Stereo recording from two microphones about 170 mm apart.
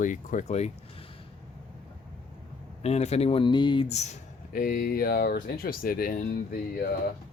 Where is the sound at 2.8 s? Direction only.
40° left (ahead or behind).